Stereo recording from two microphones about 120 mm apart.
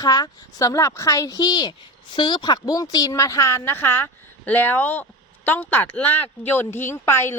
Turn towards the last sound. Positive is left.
turn(degrees=20)  # may be behind; listen again after turning